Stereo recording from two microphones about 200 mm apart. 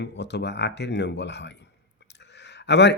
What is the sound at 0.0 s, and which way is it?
A man's voice, 60° left (ahead or behind).